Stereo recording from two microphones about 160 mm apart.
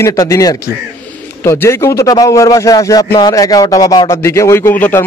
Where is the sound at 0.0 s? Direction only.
20° left (ahead or behind).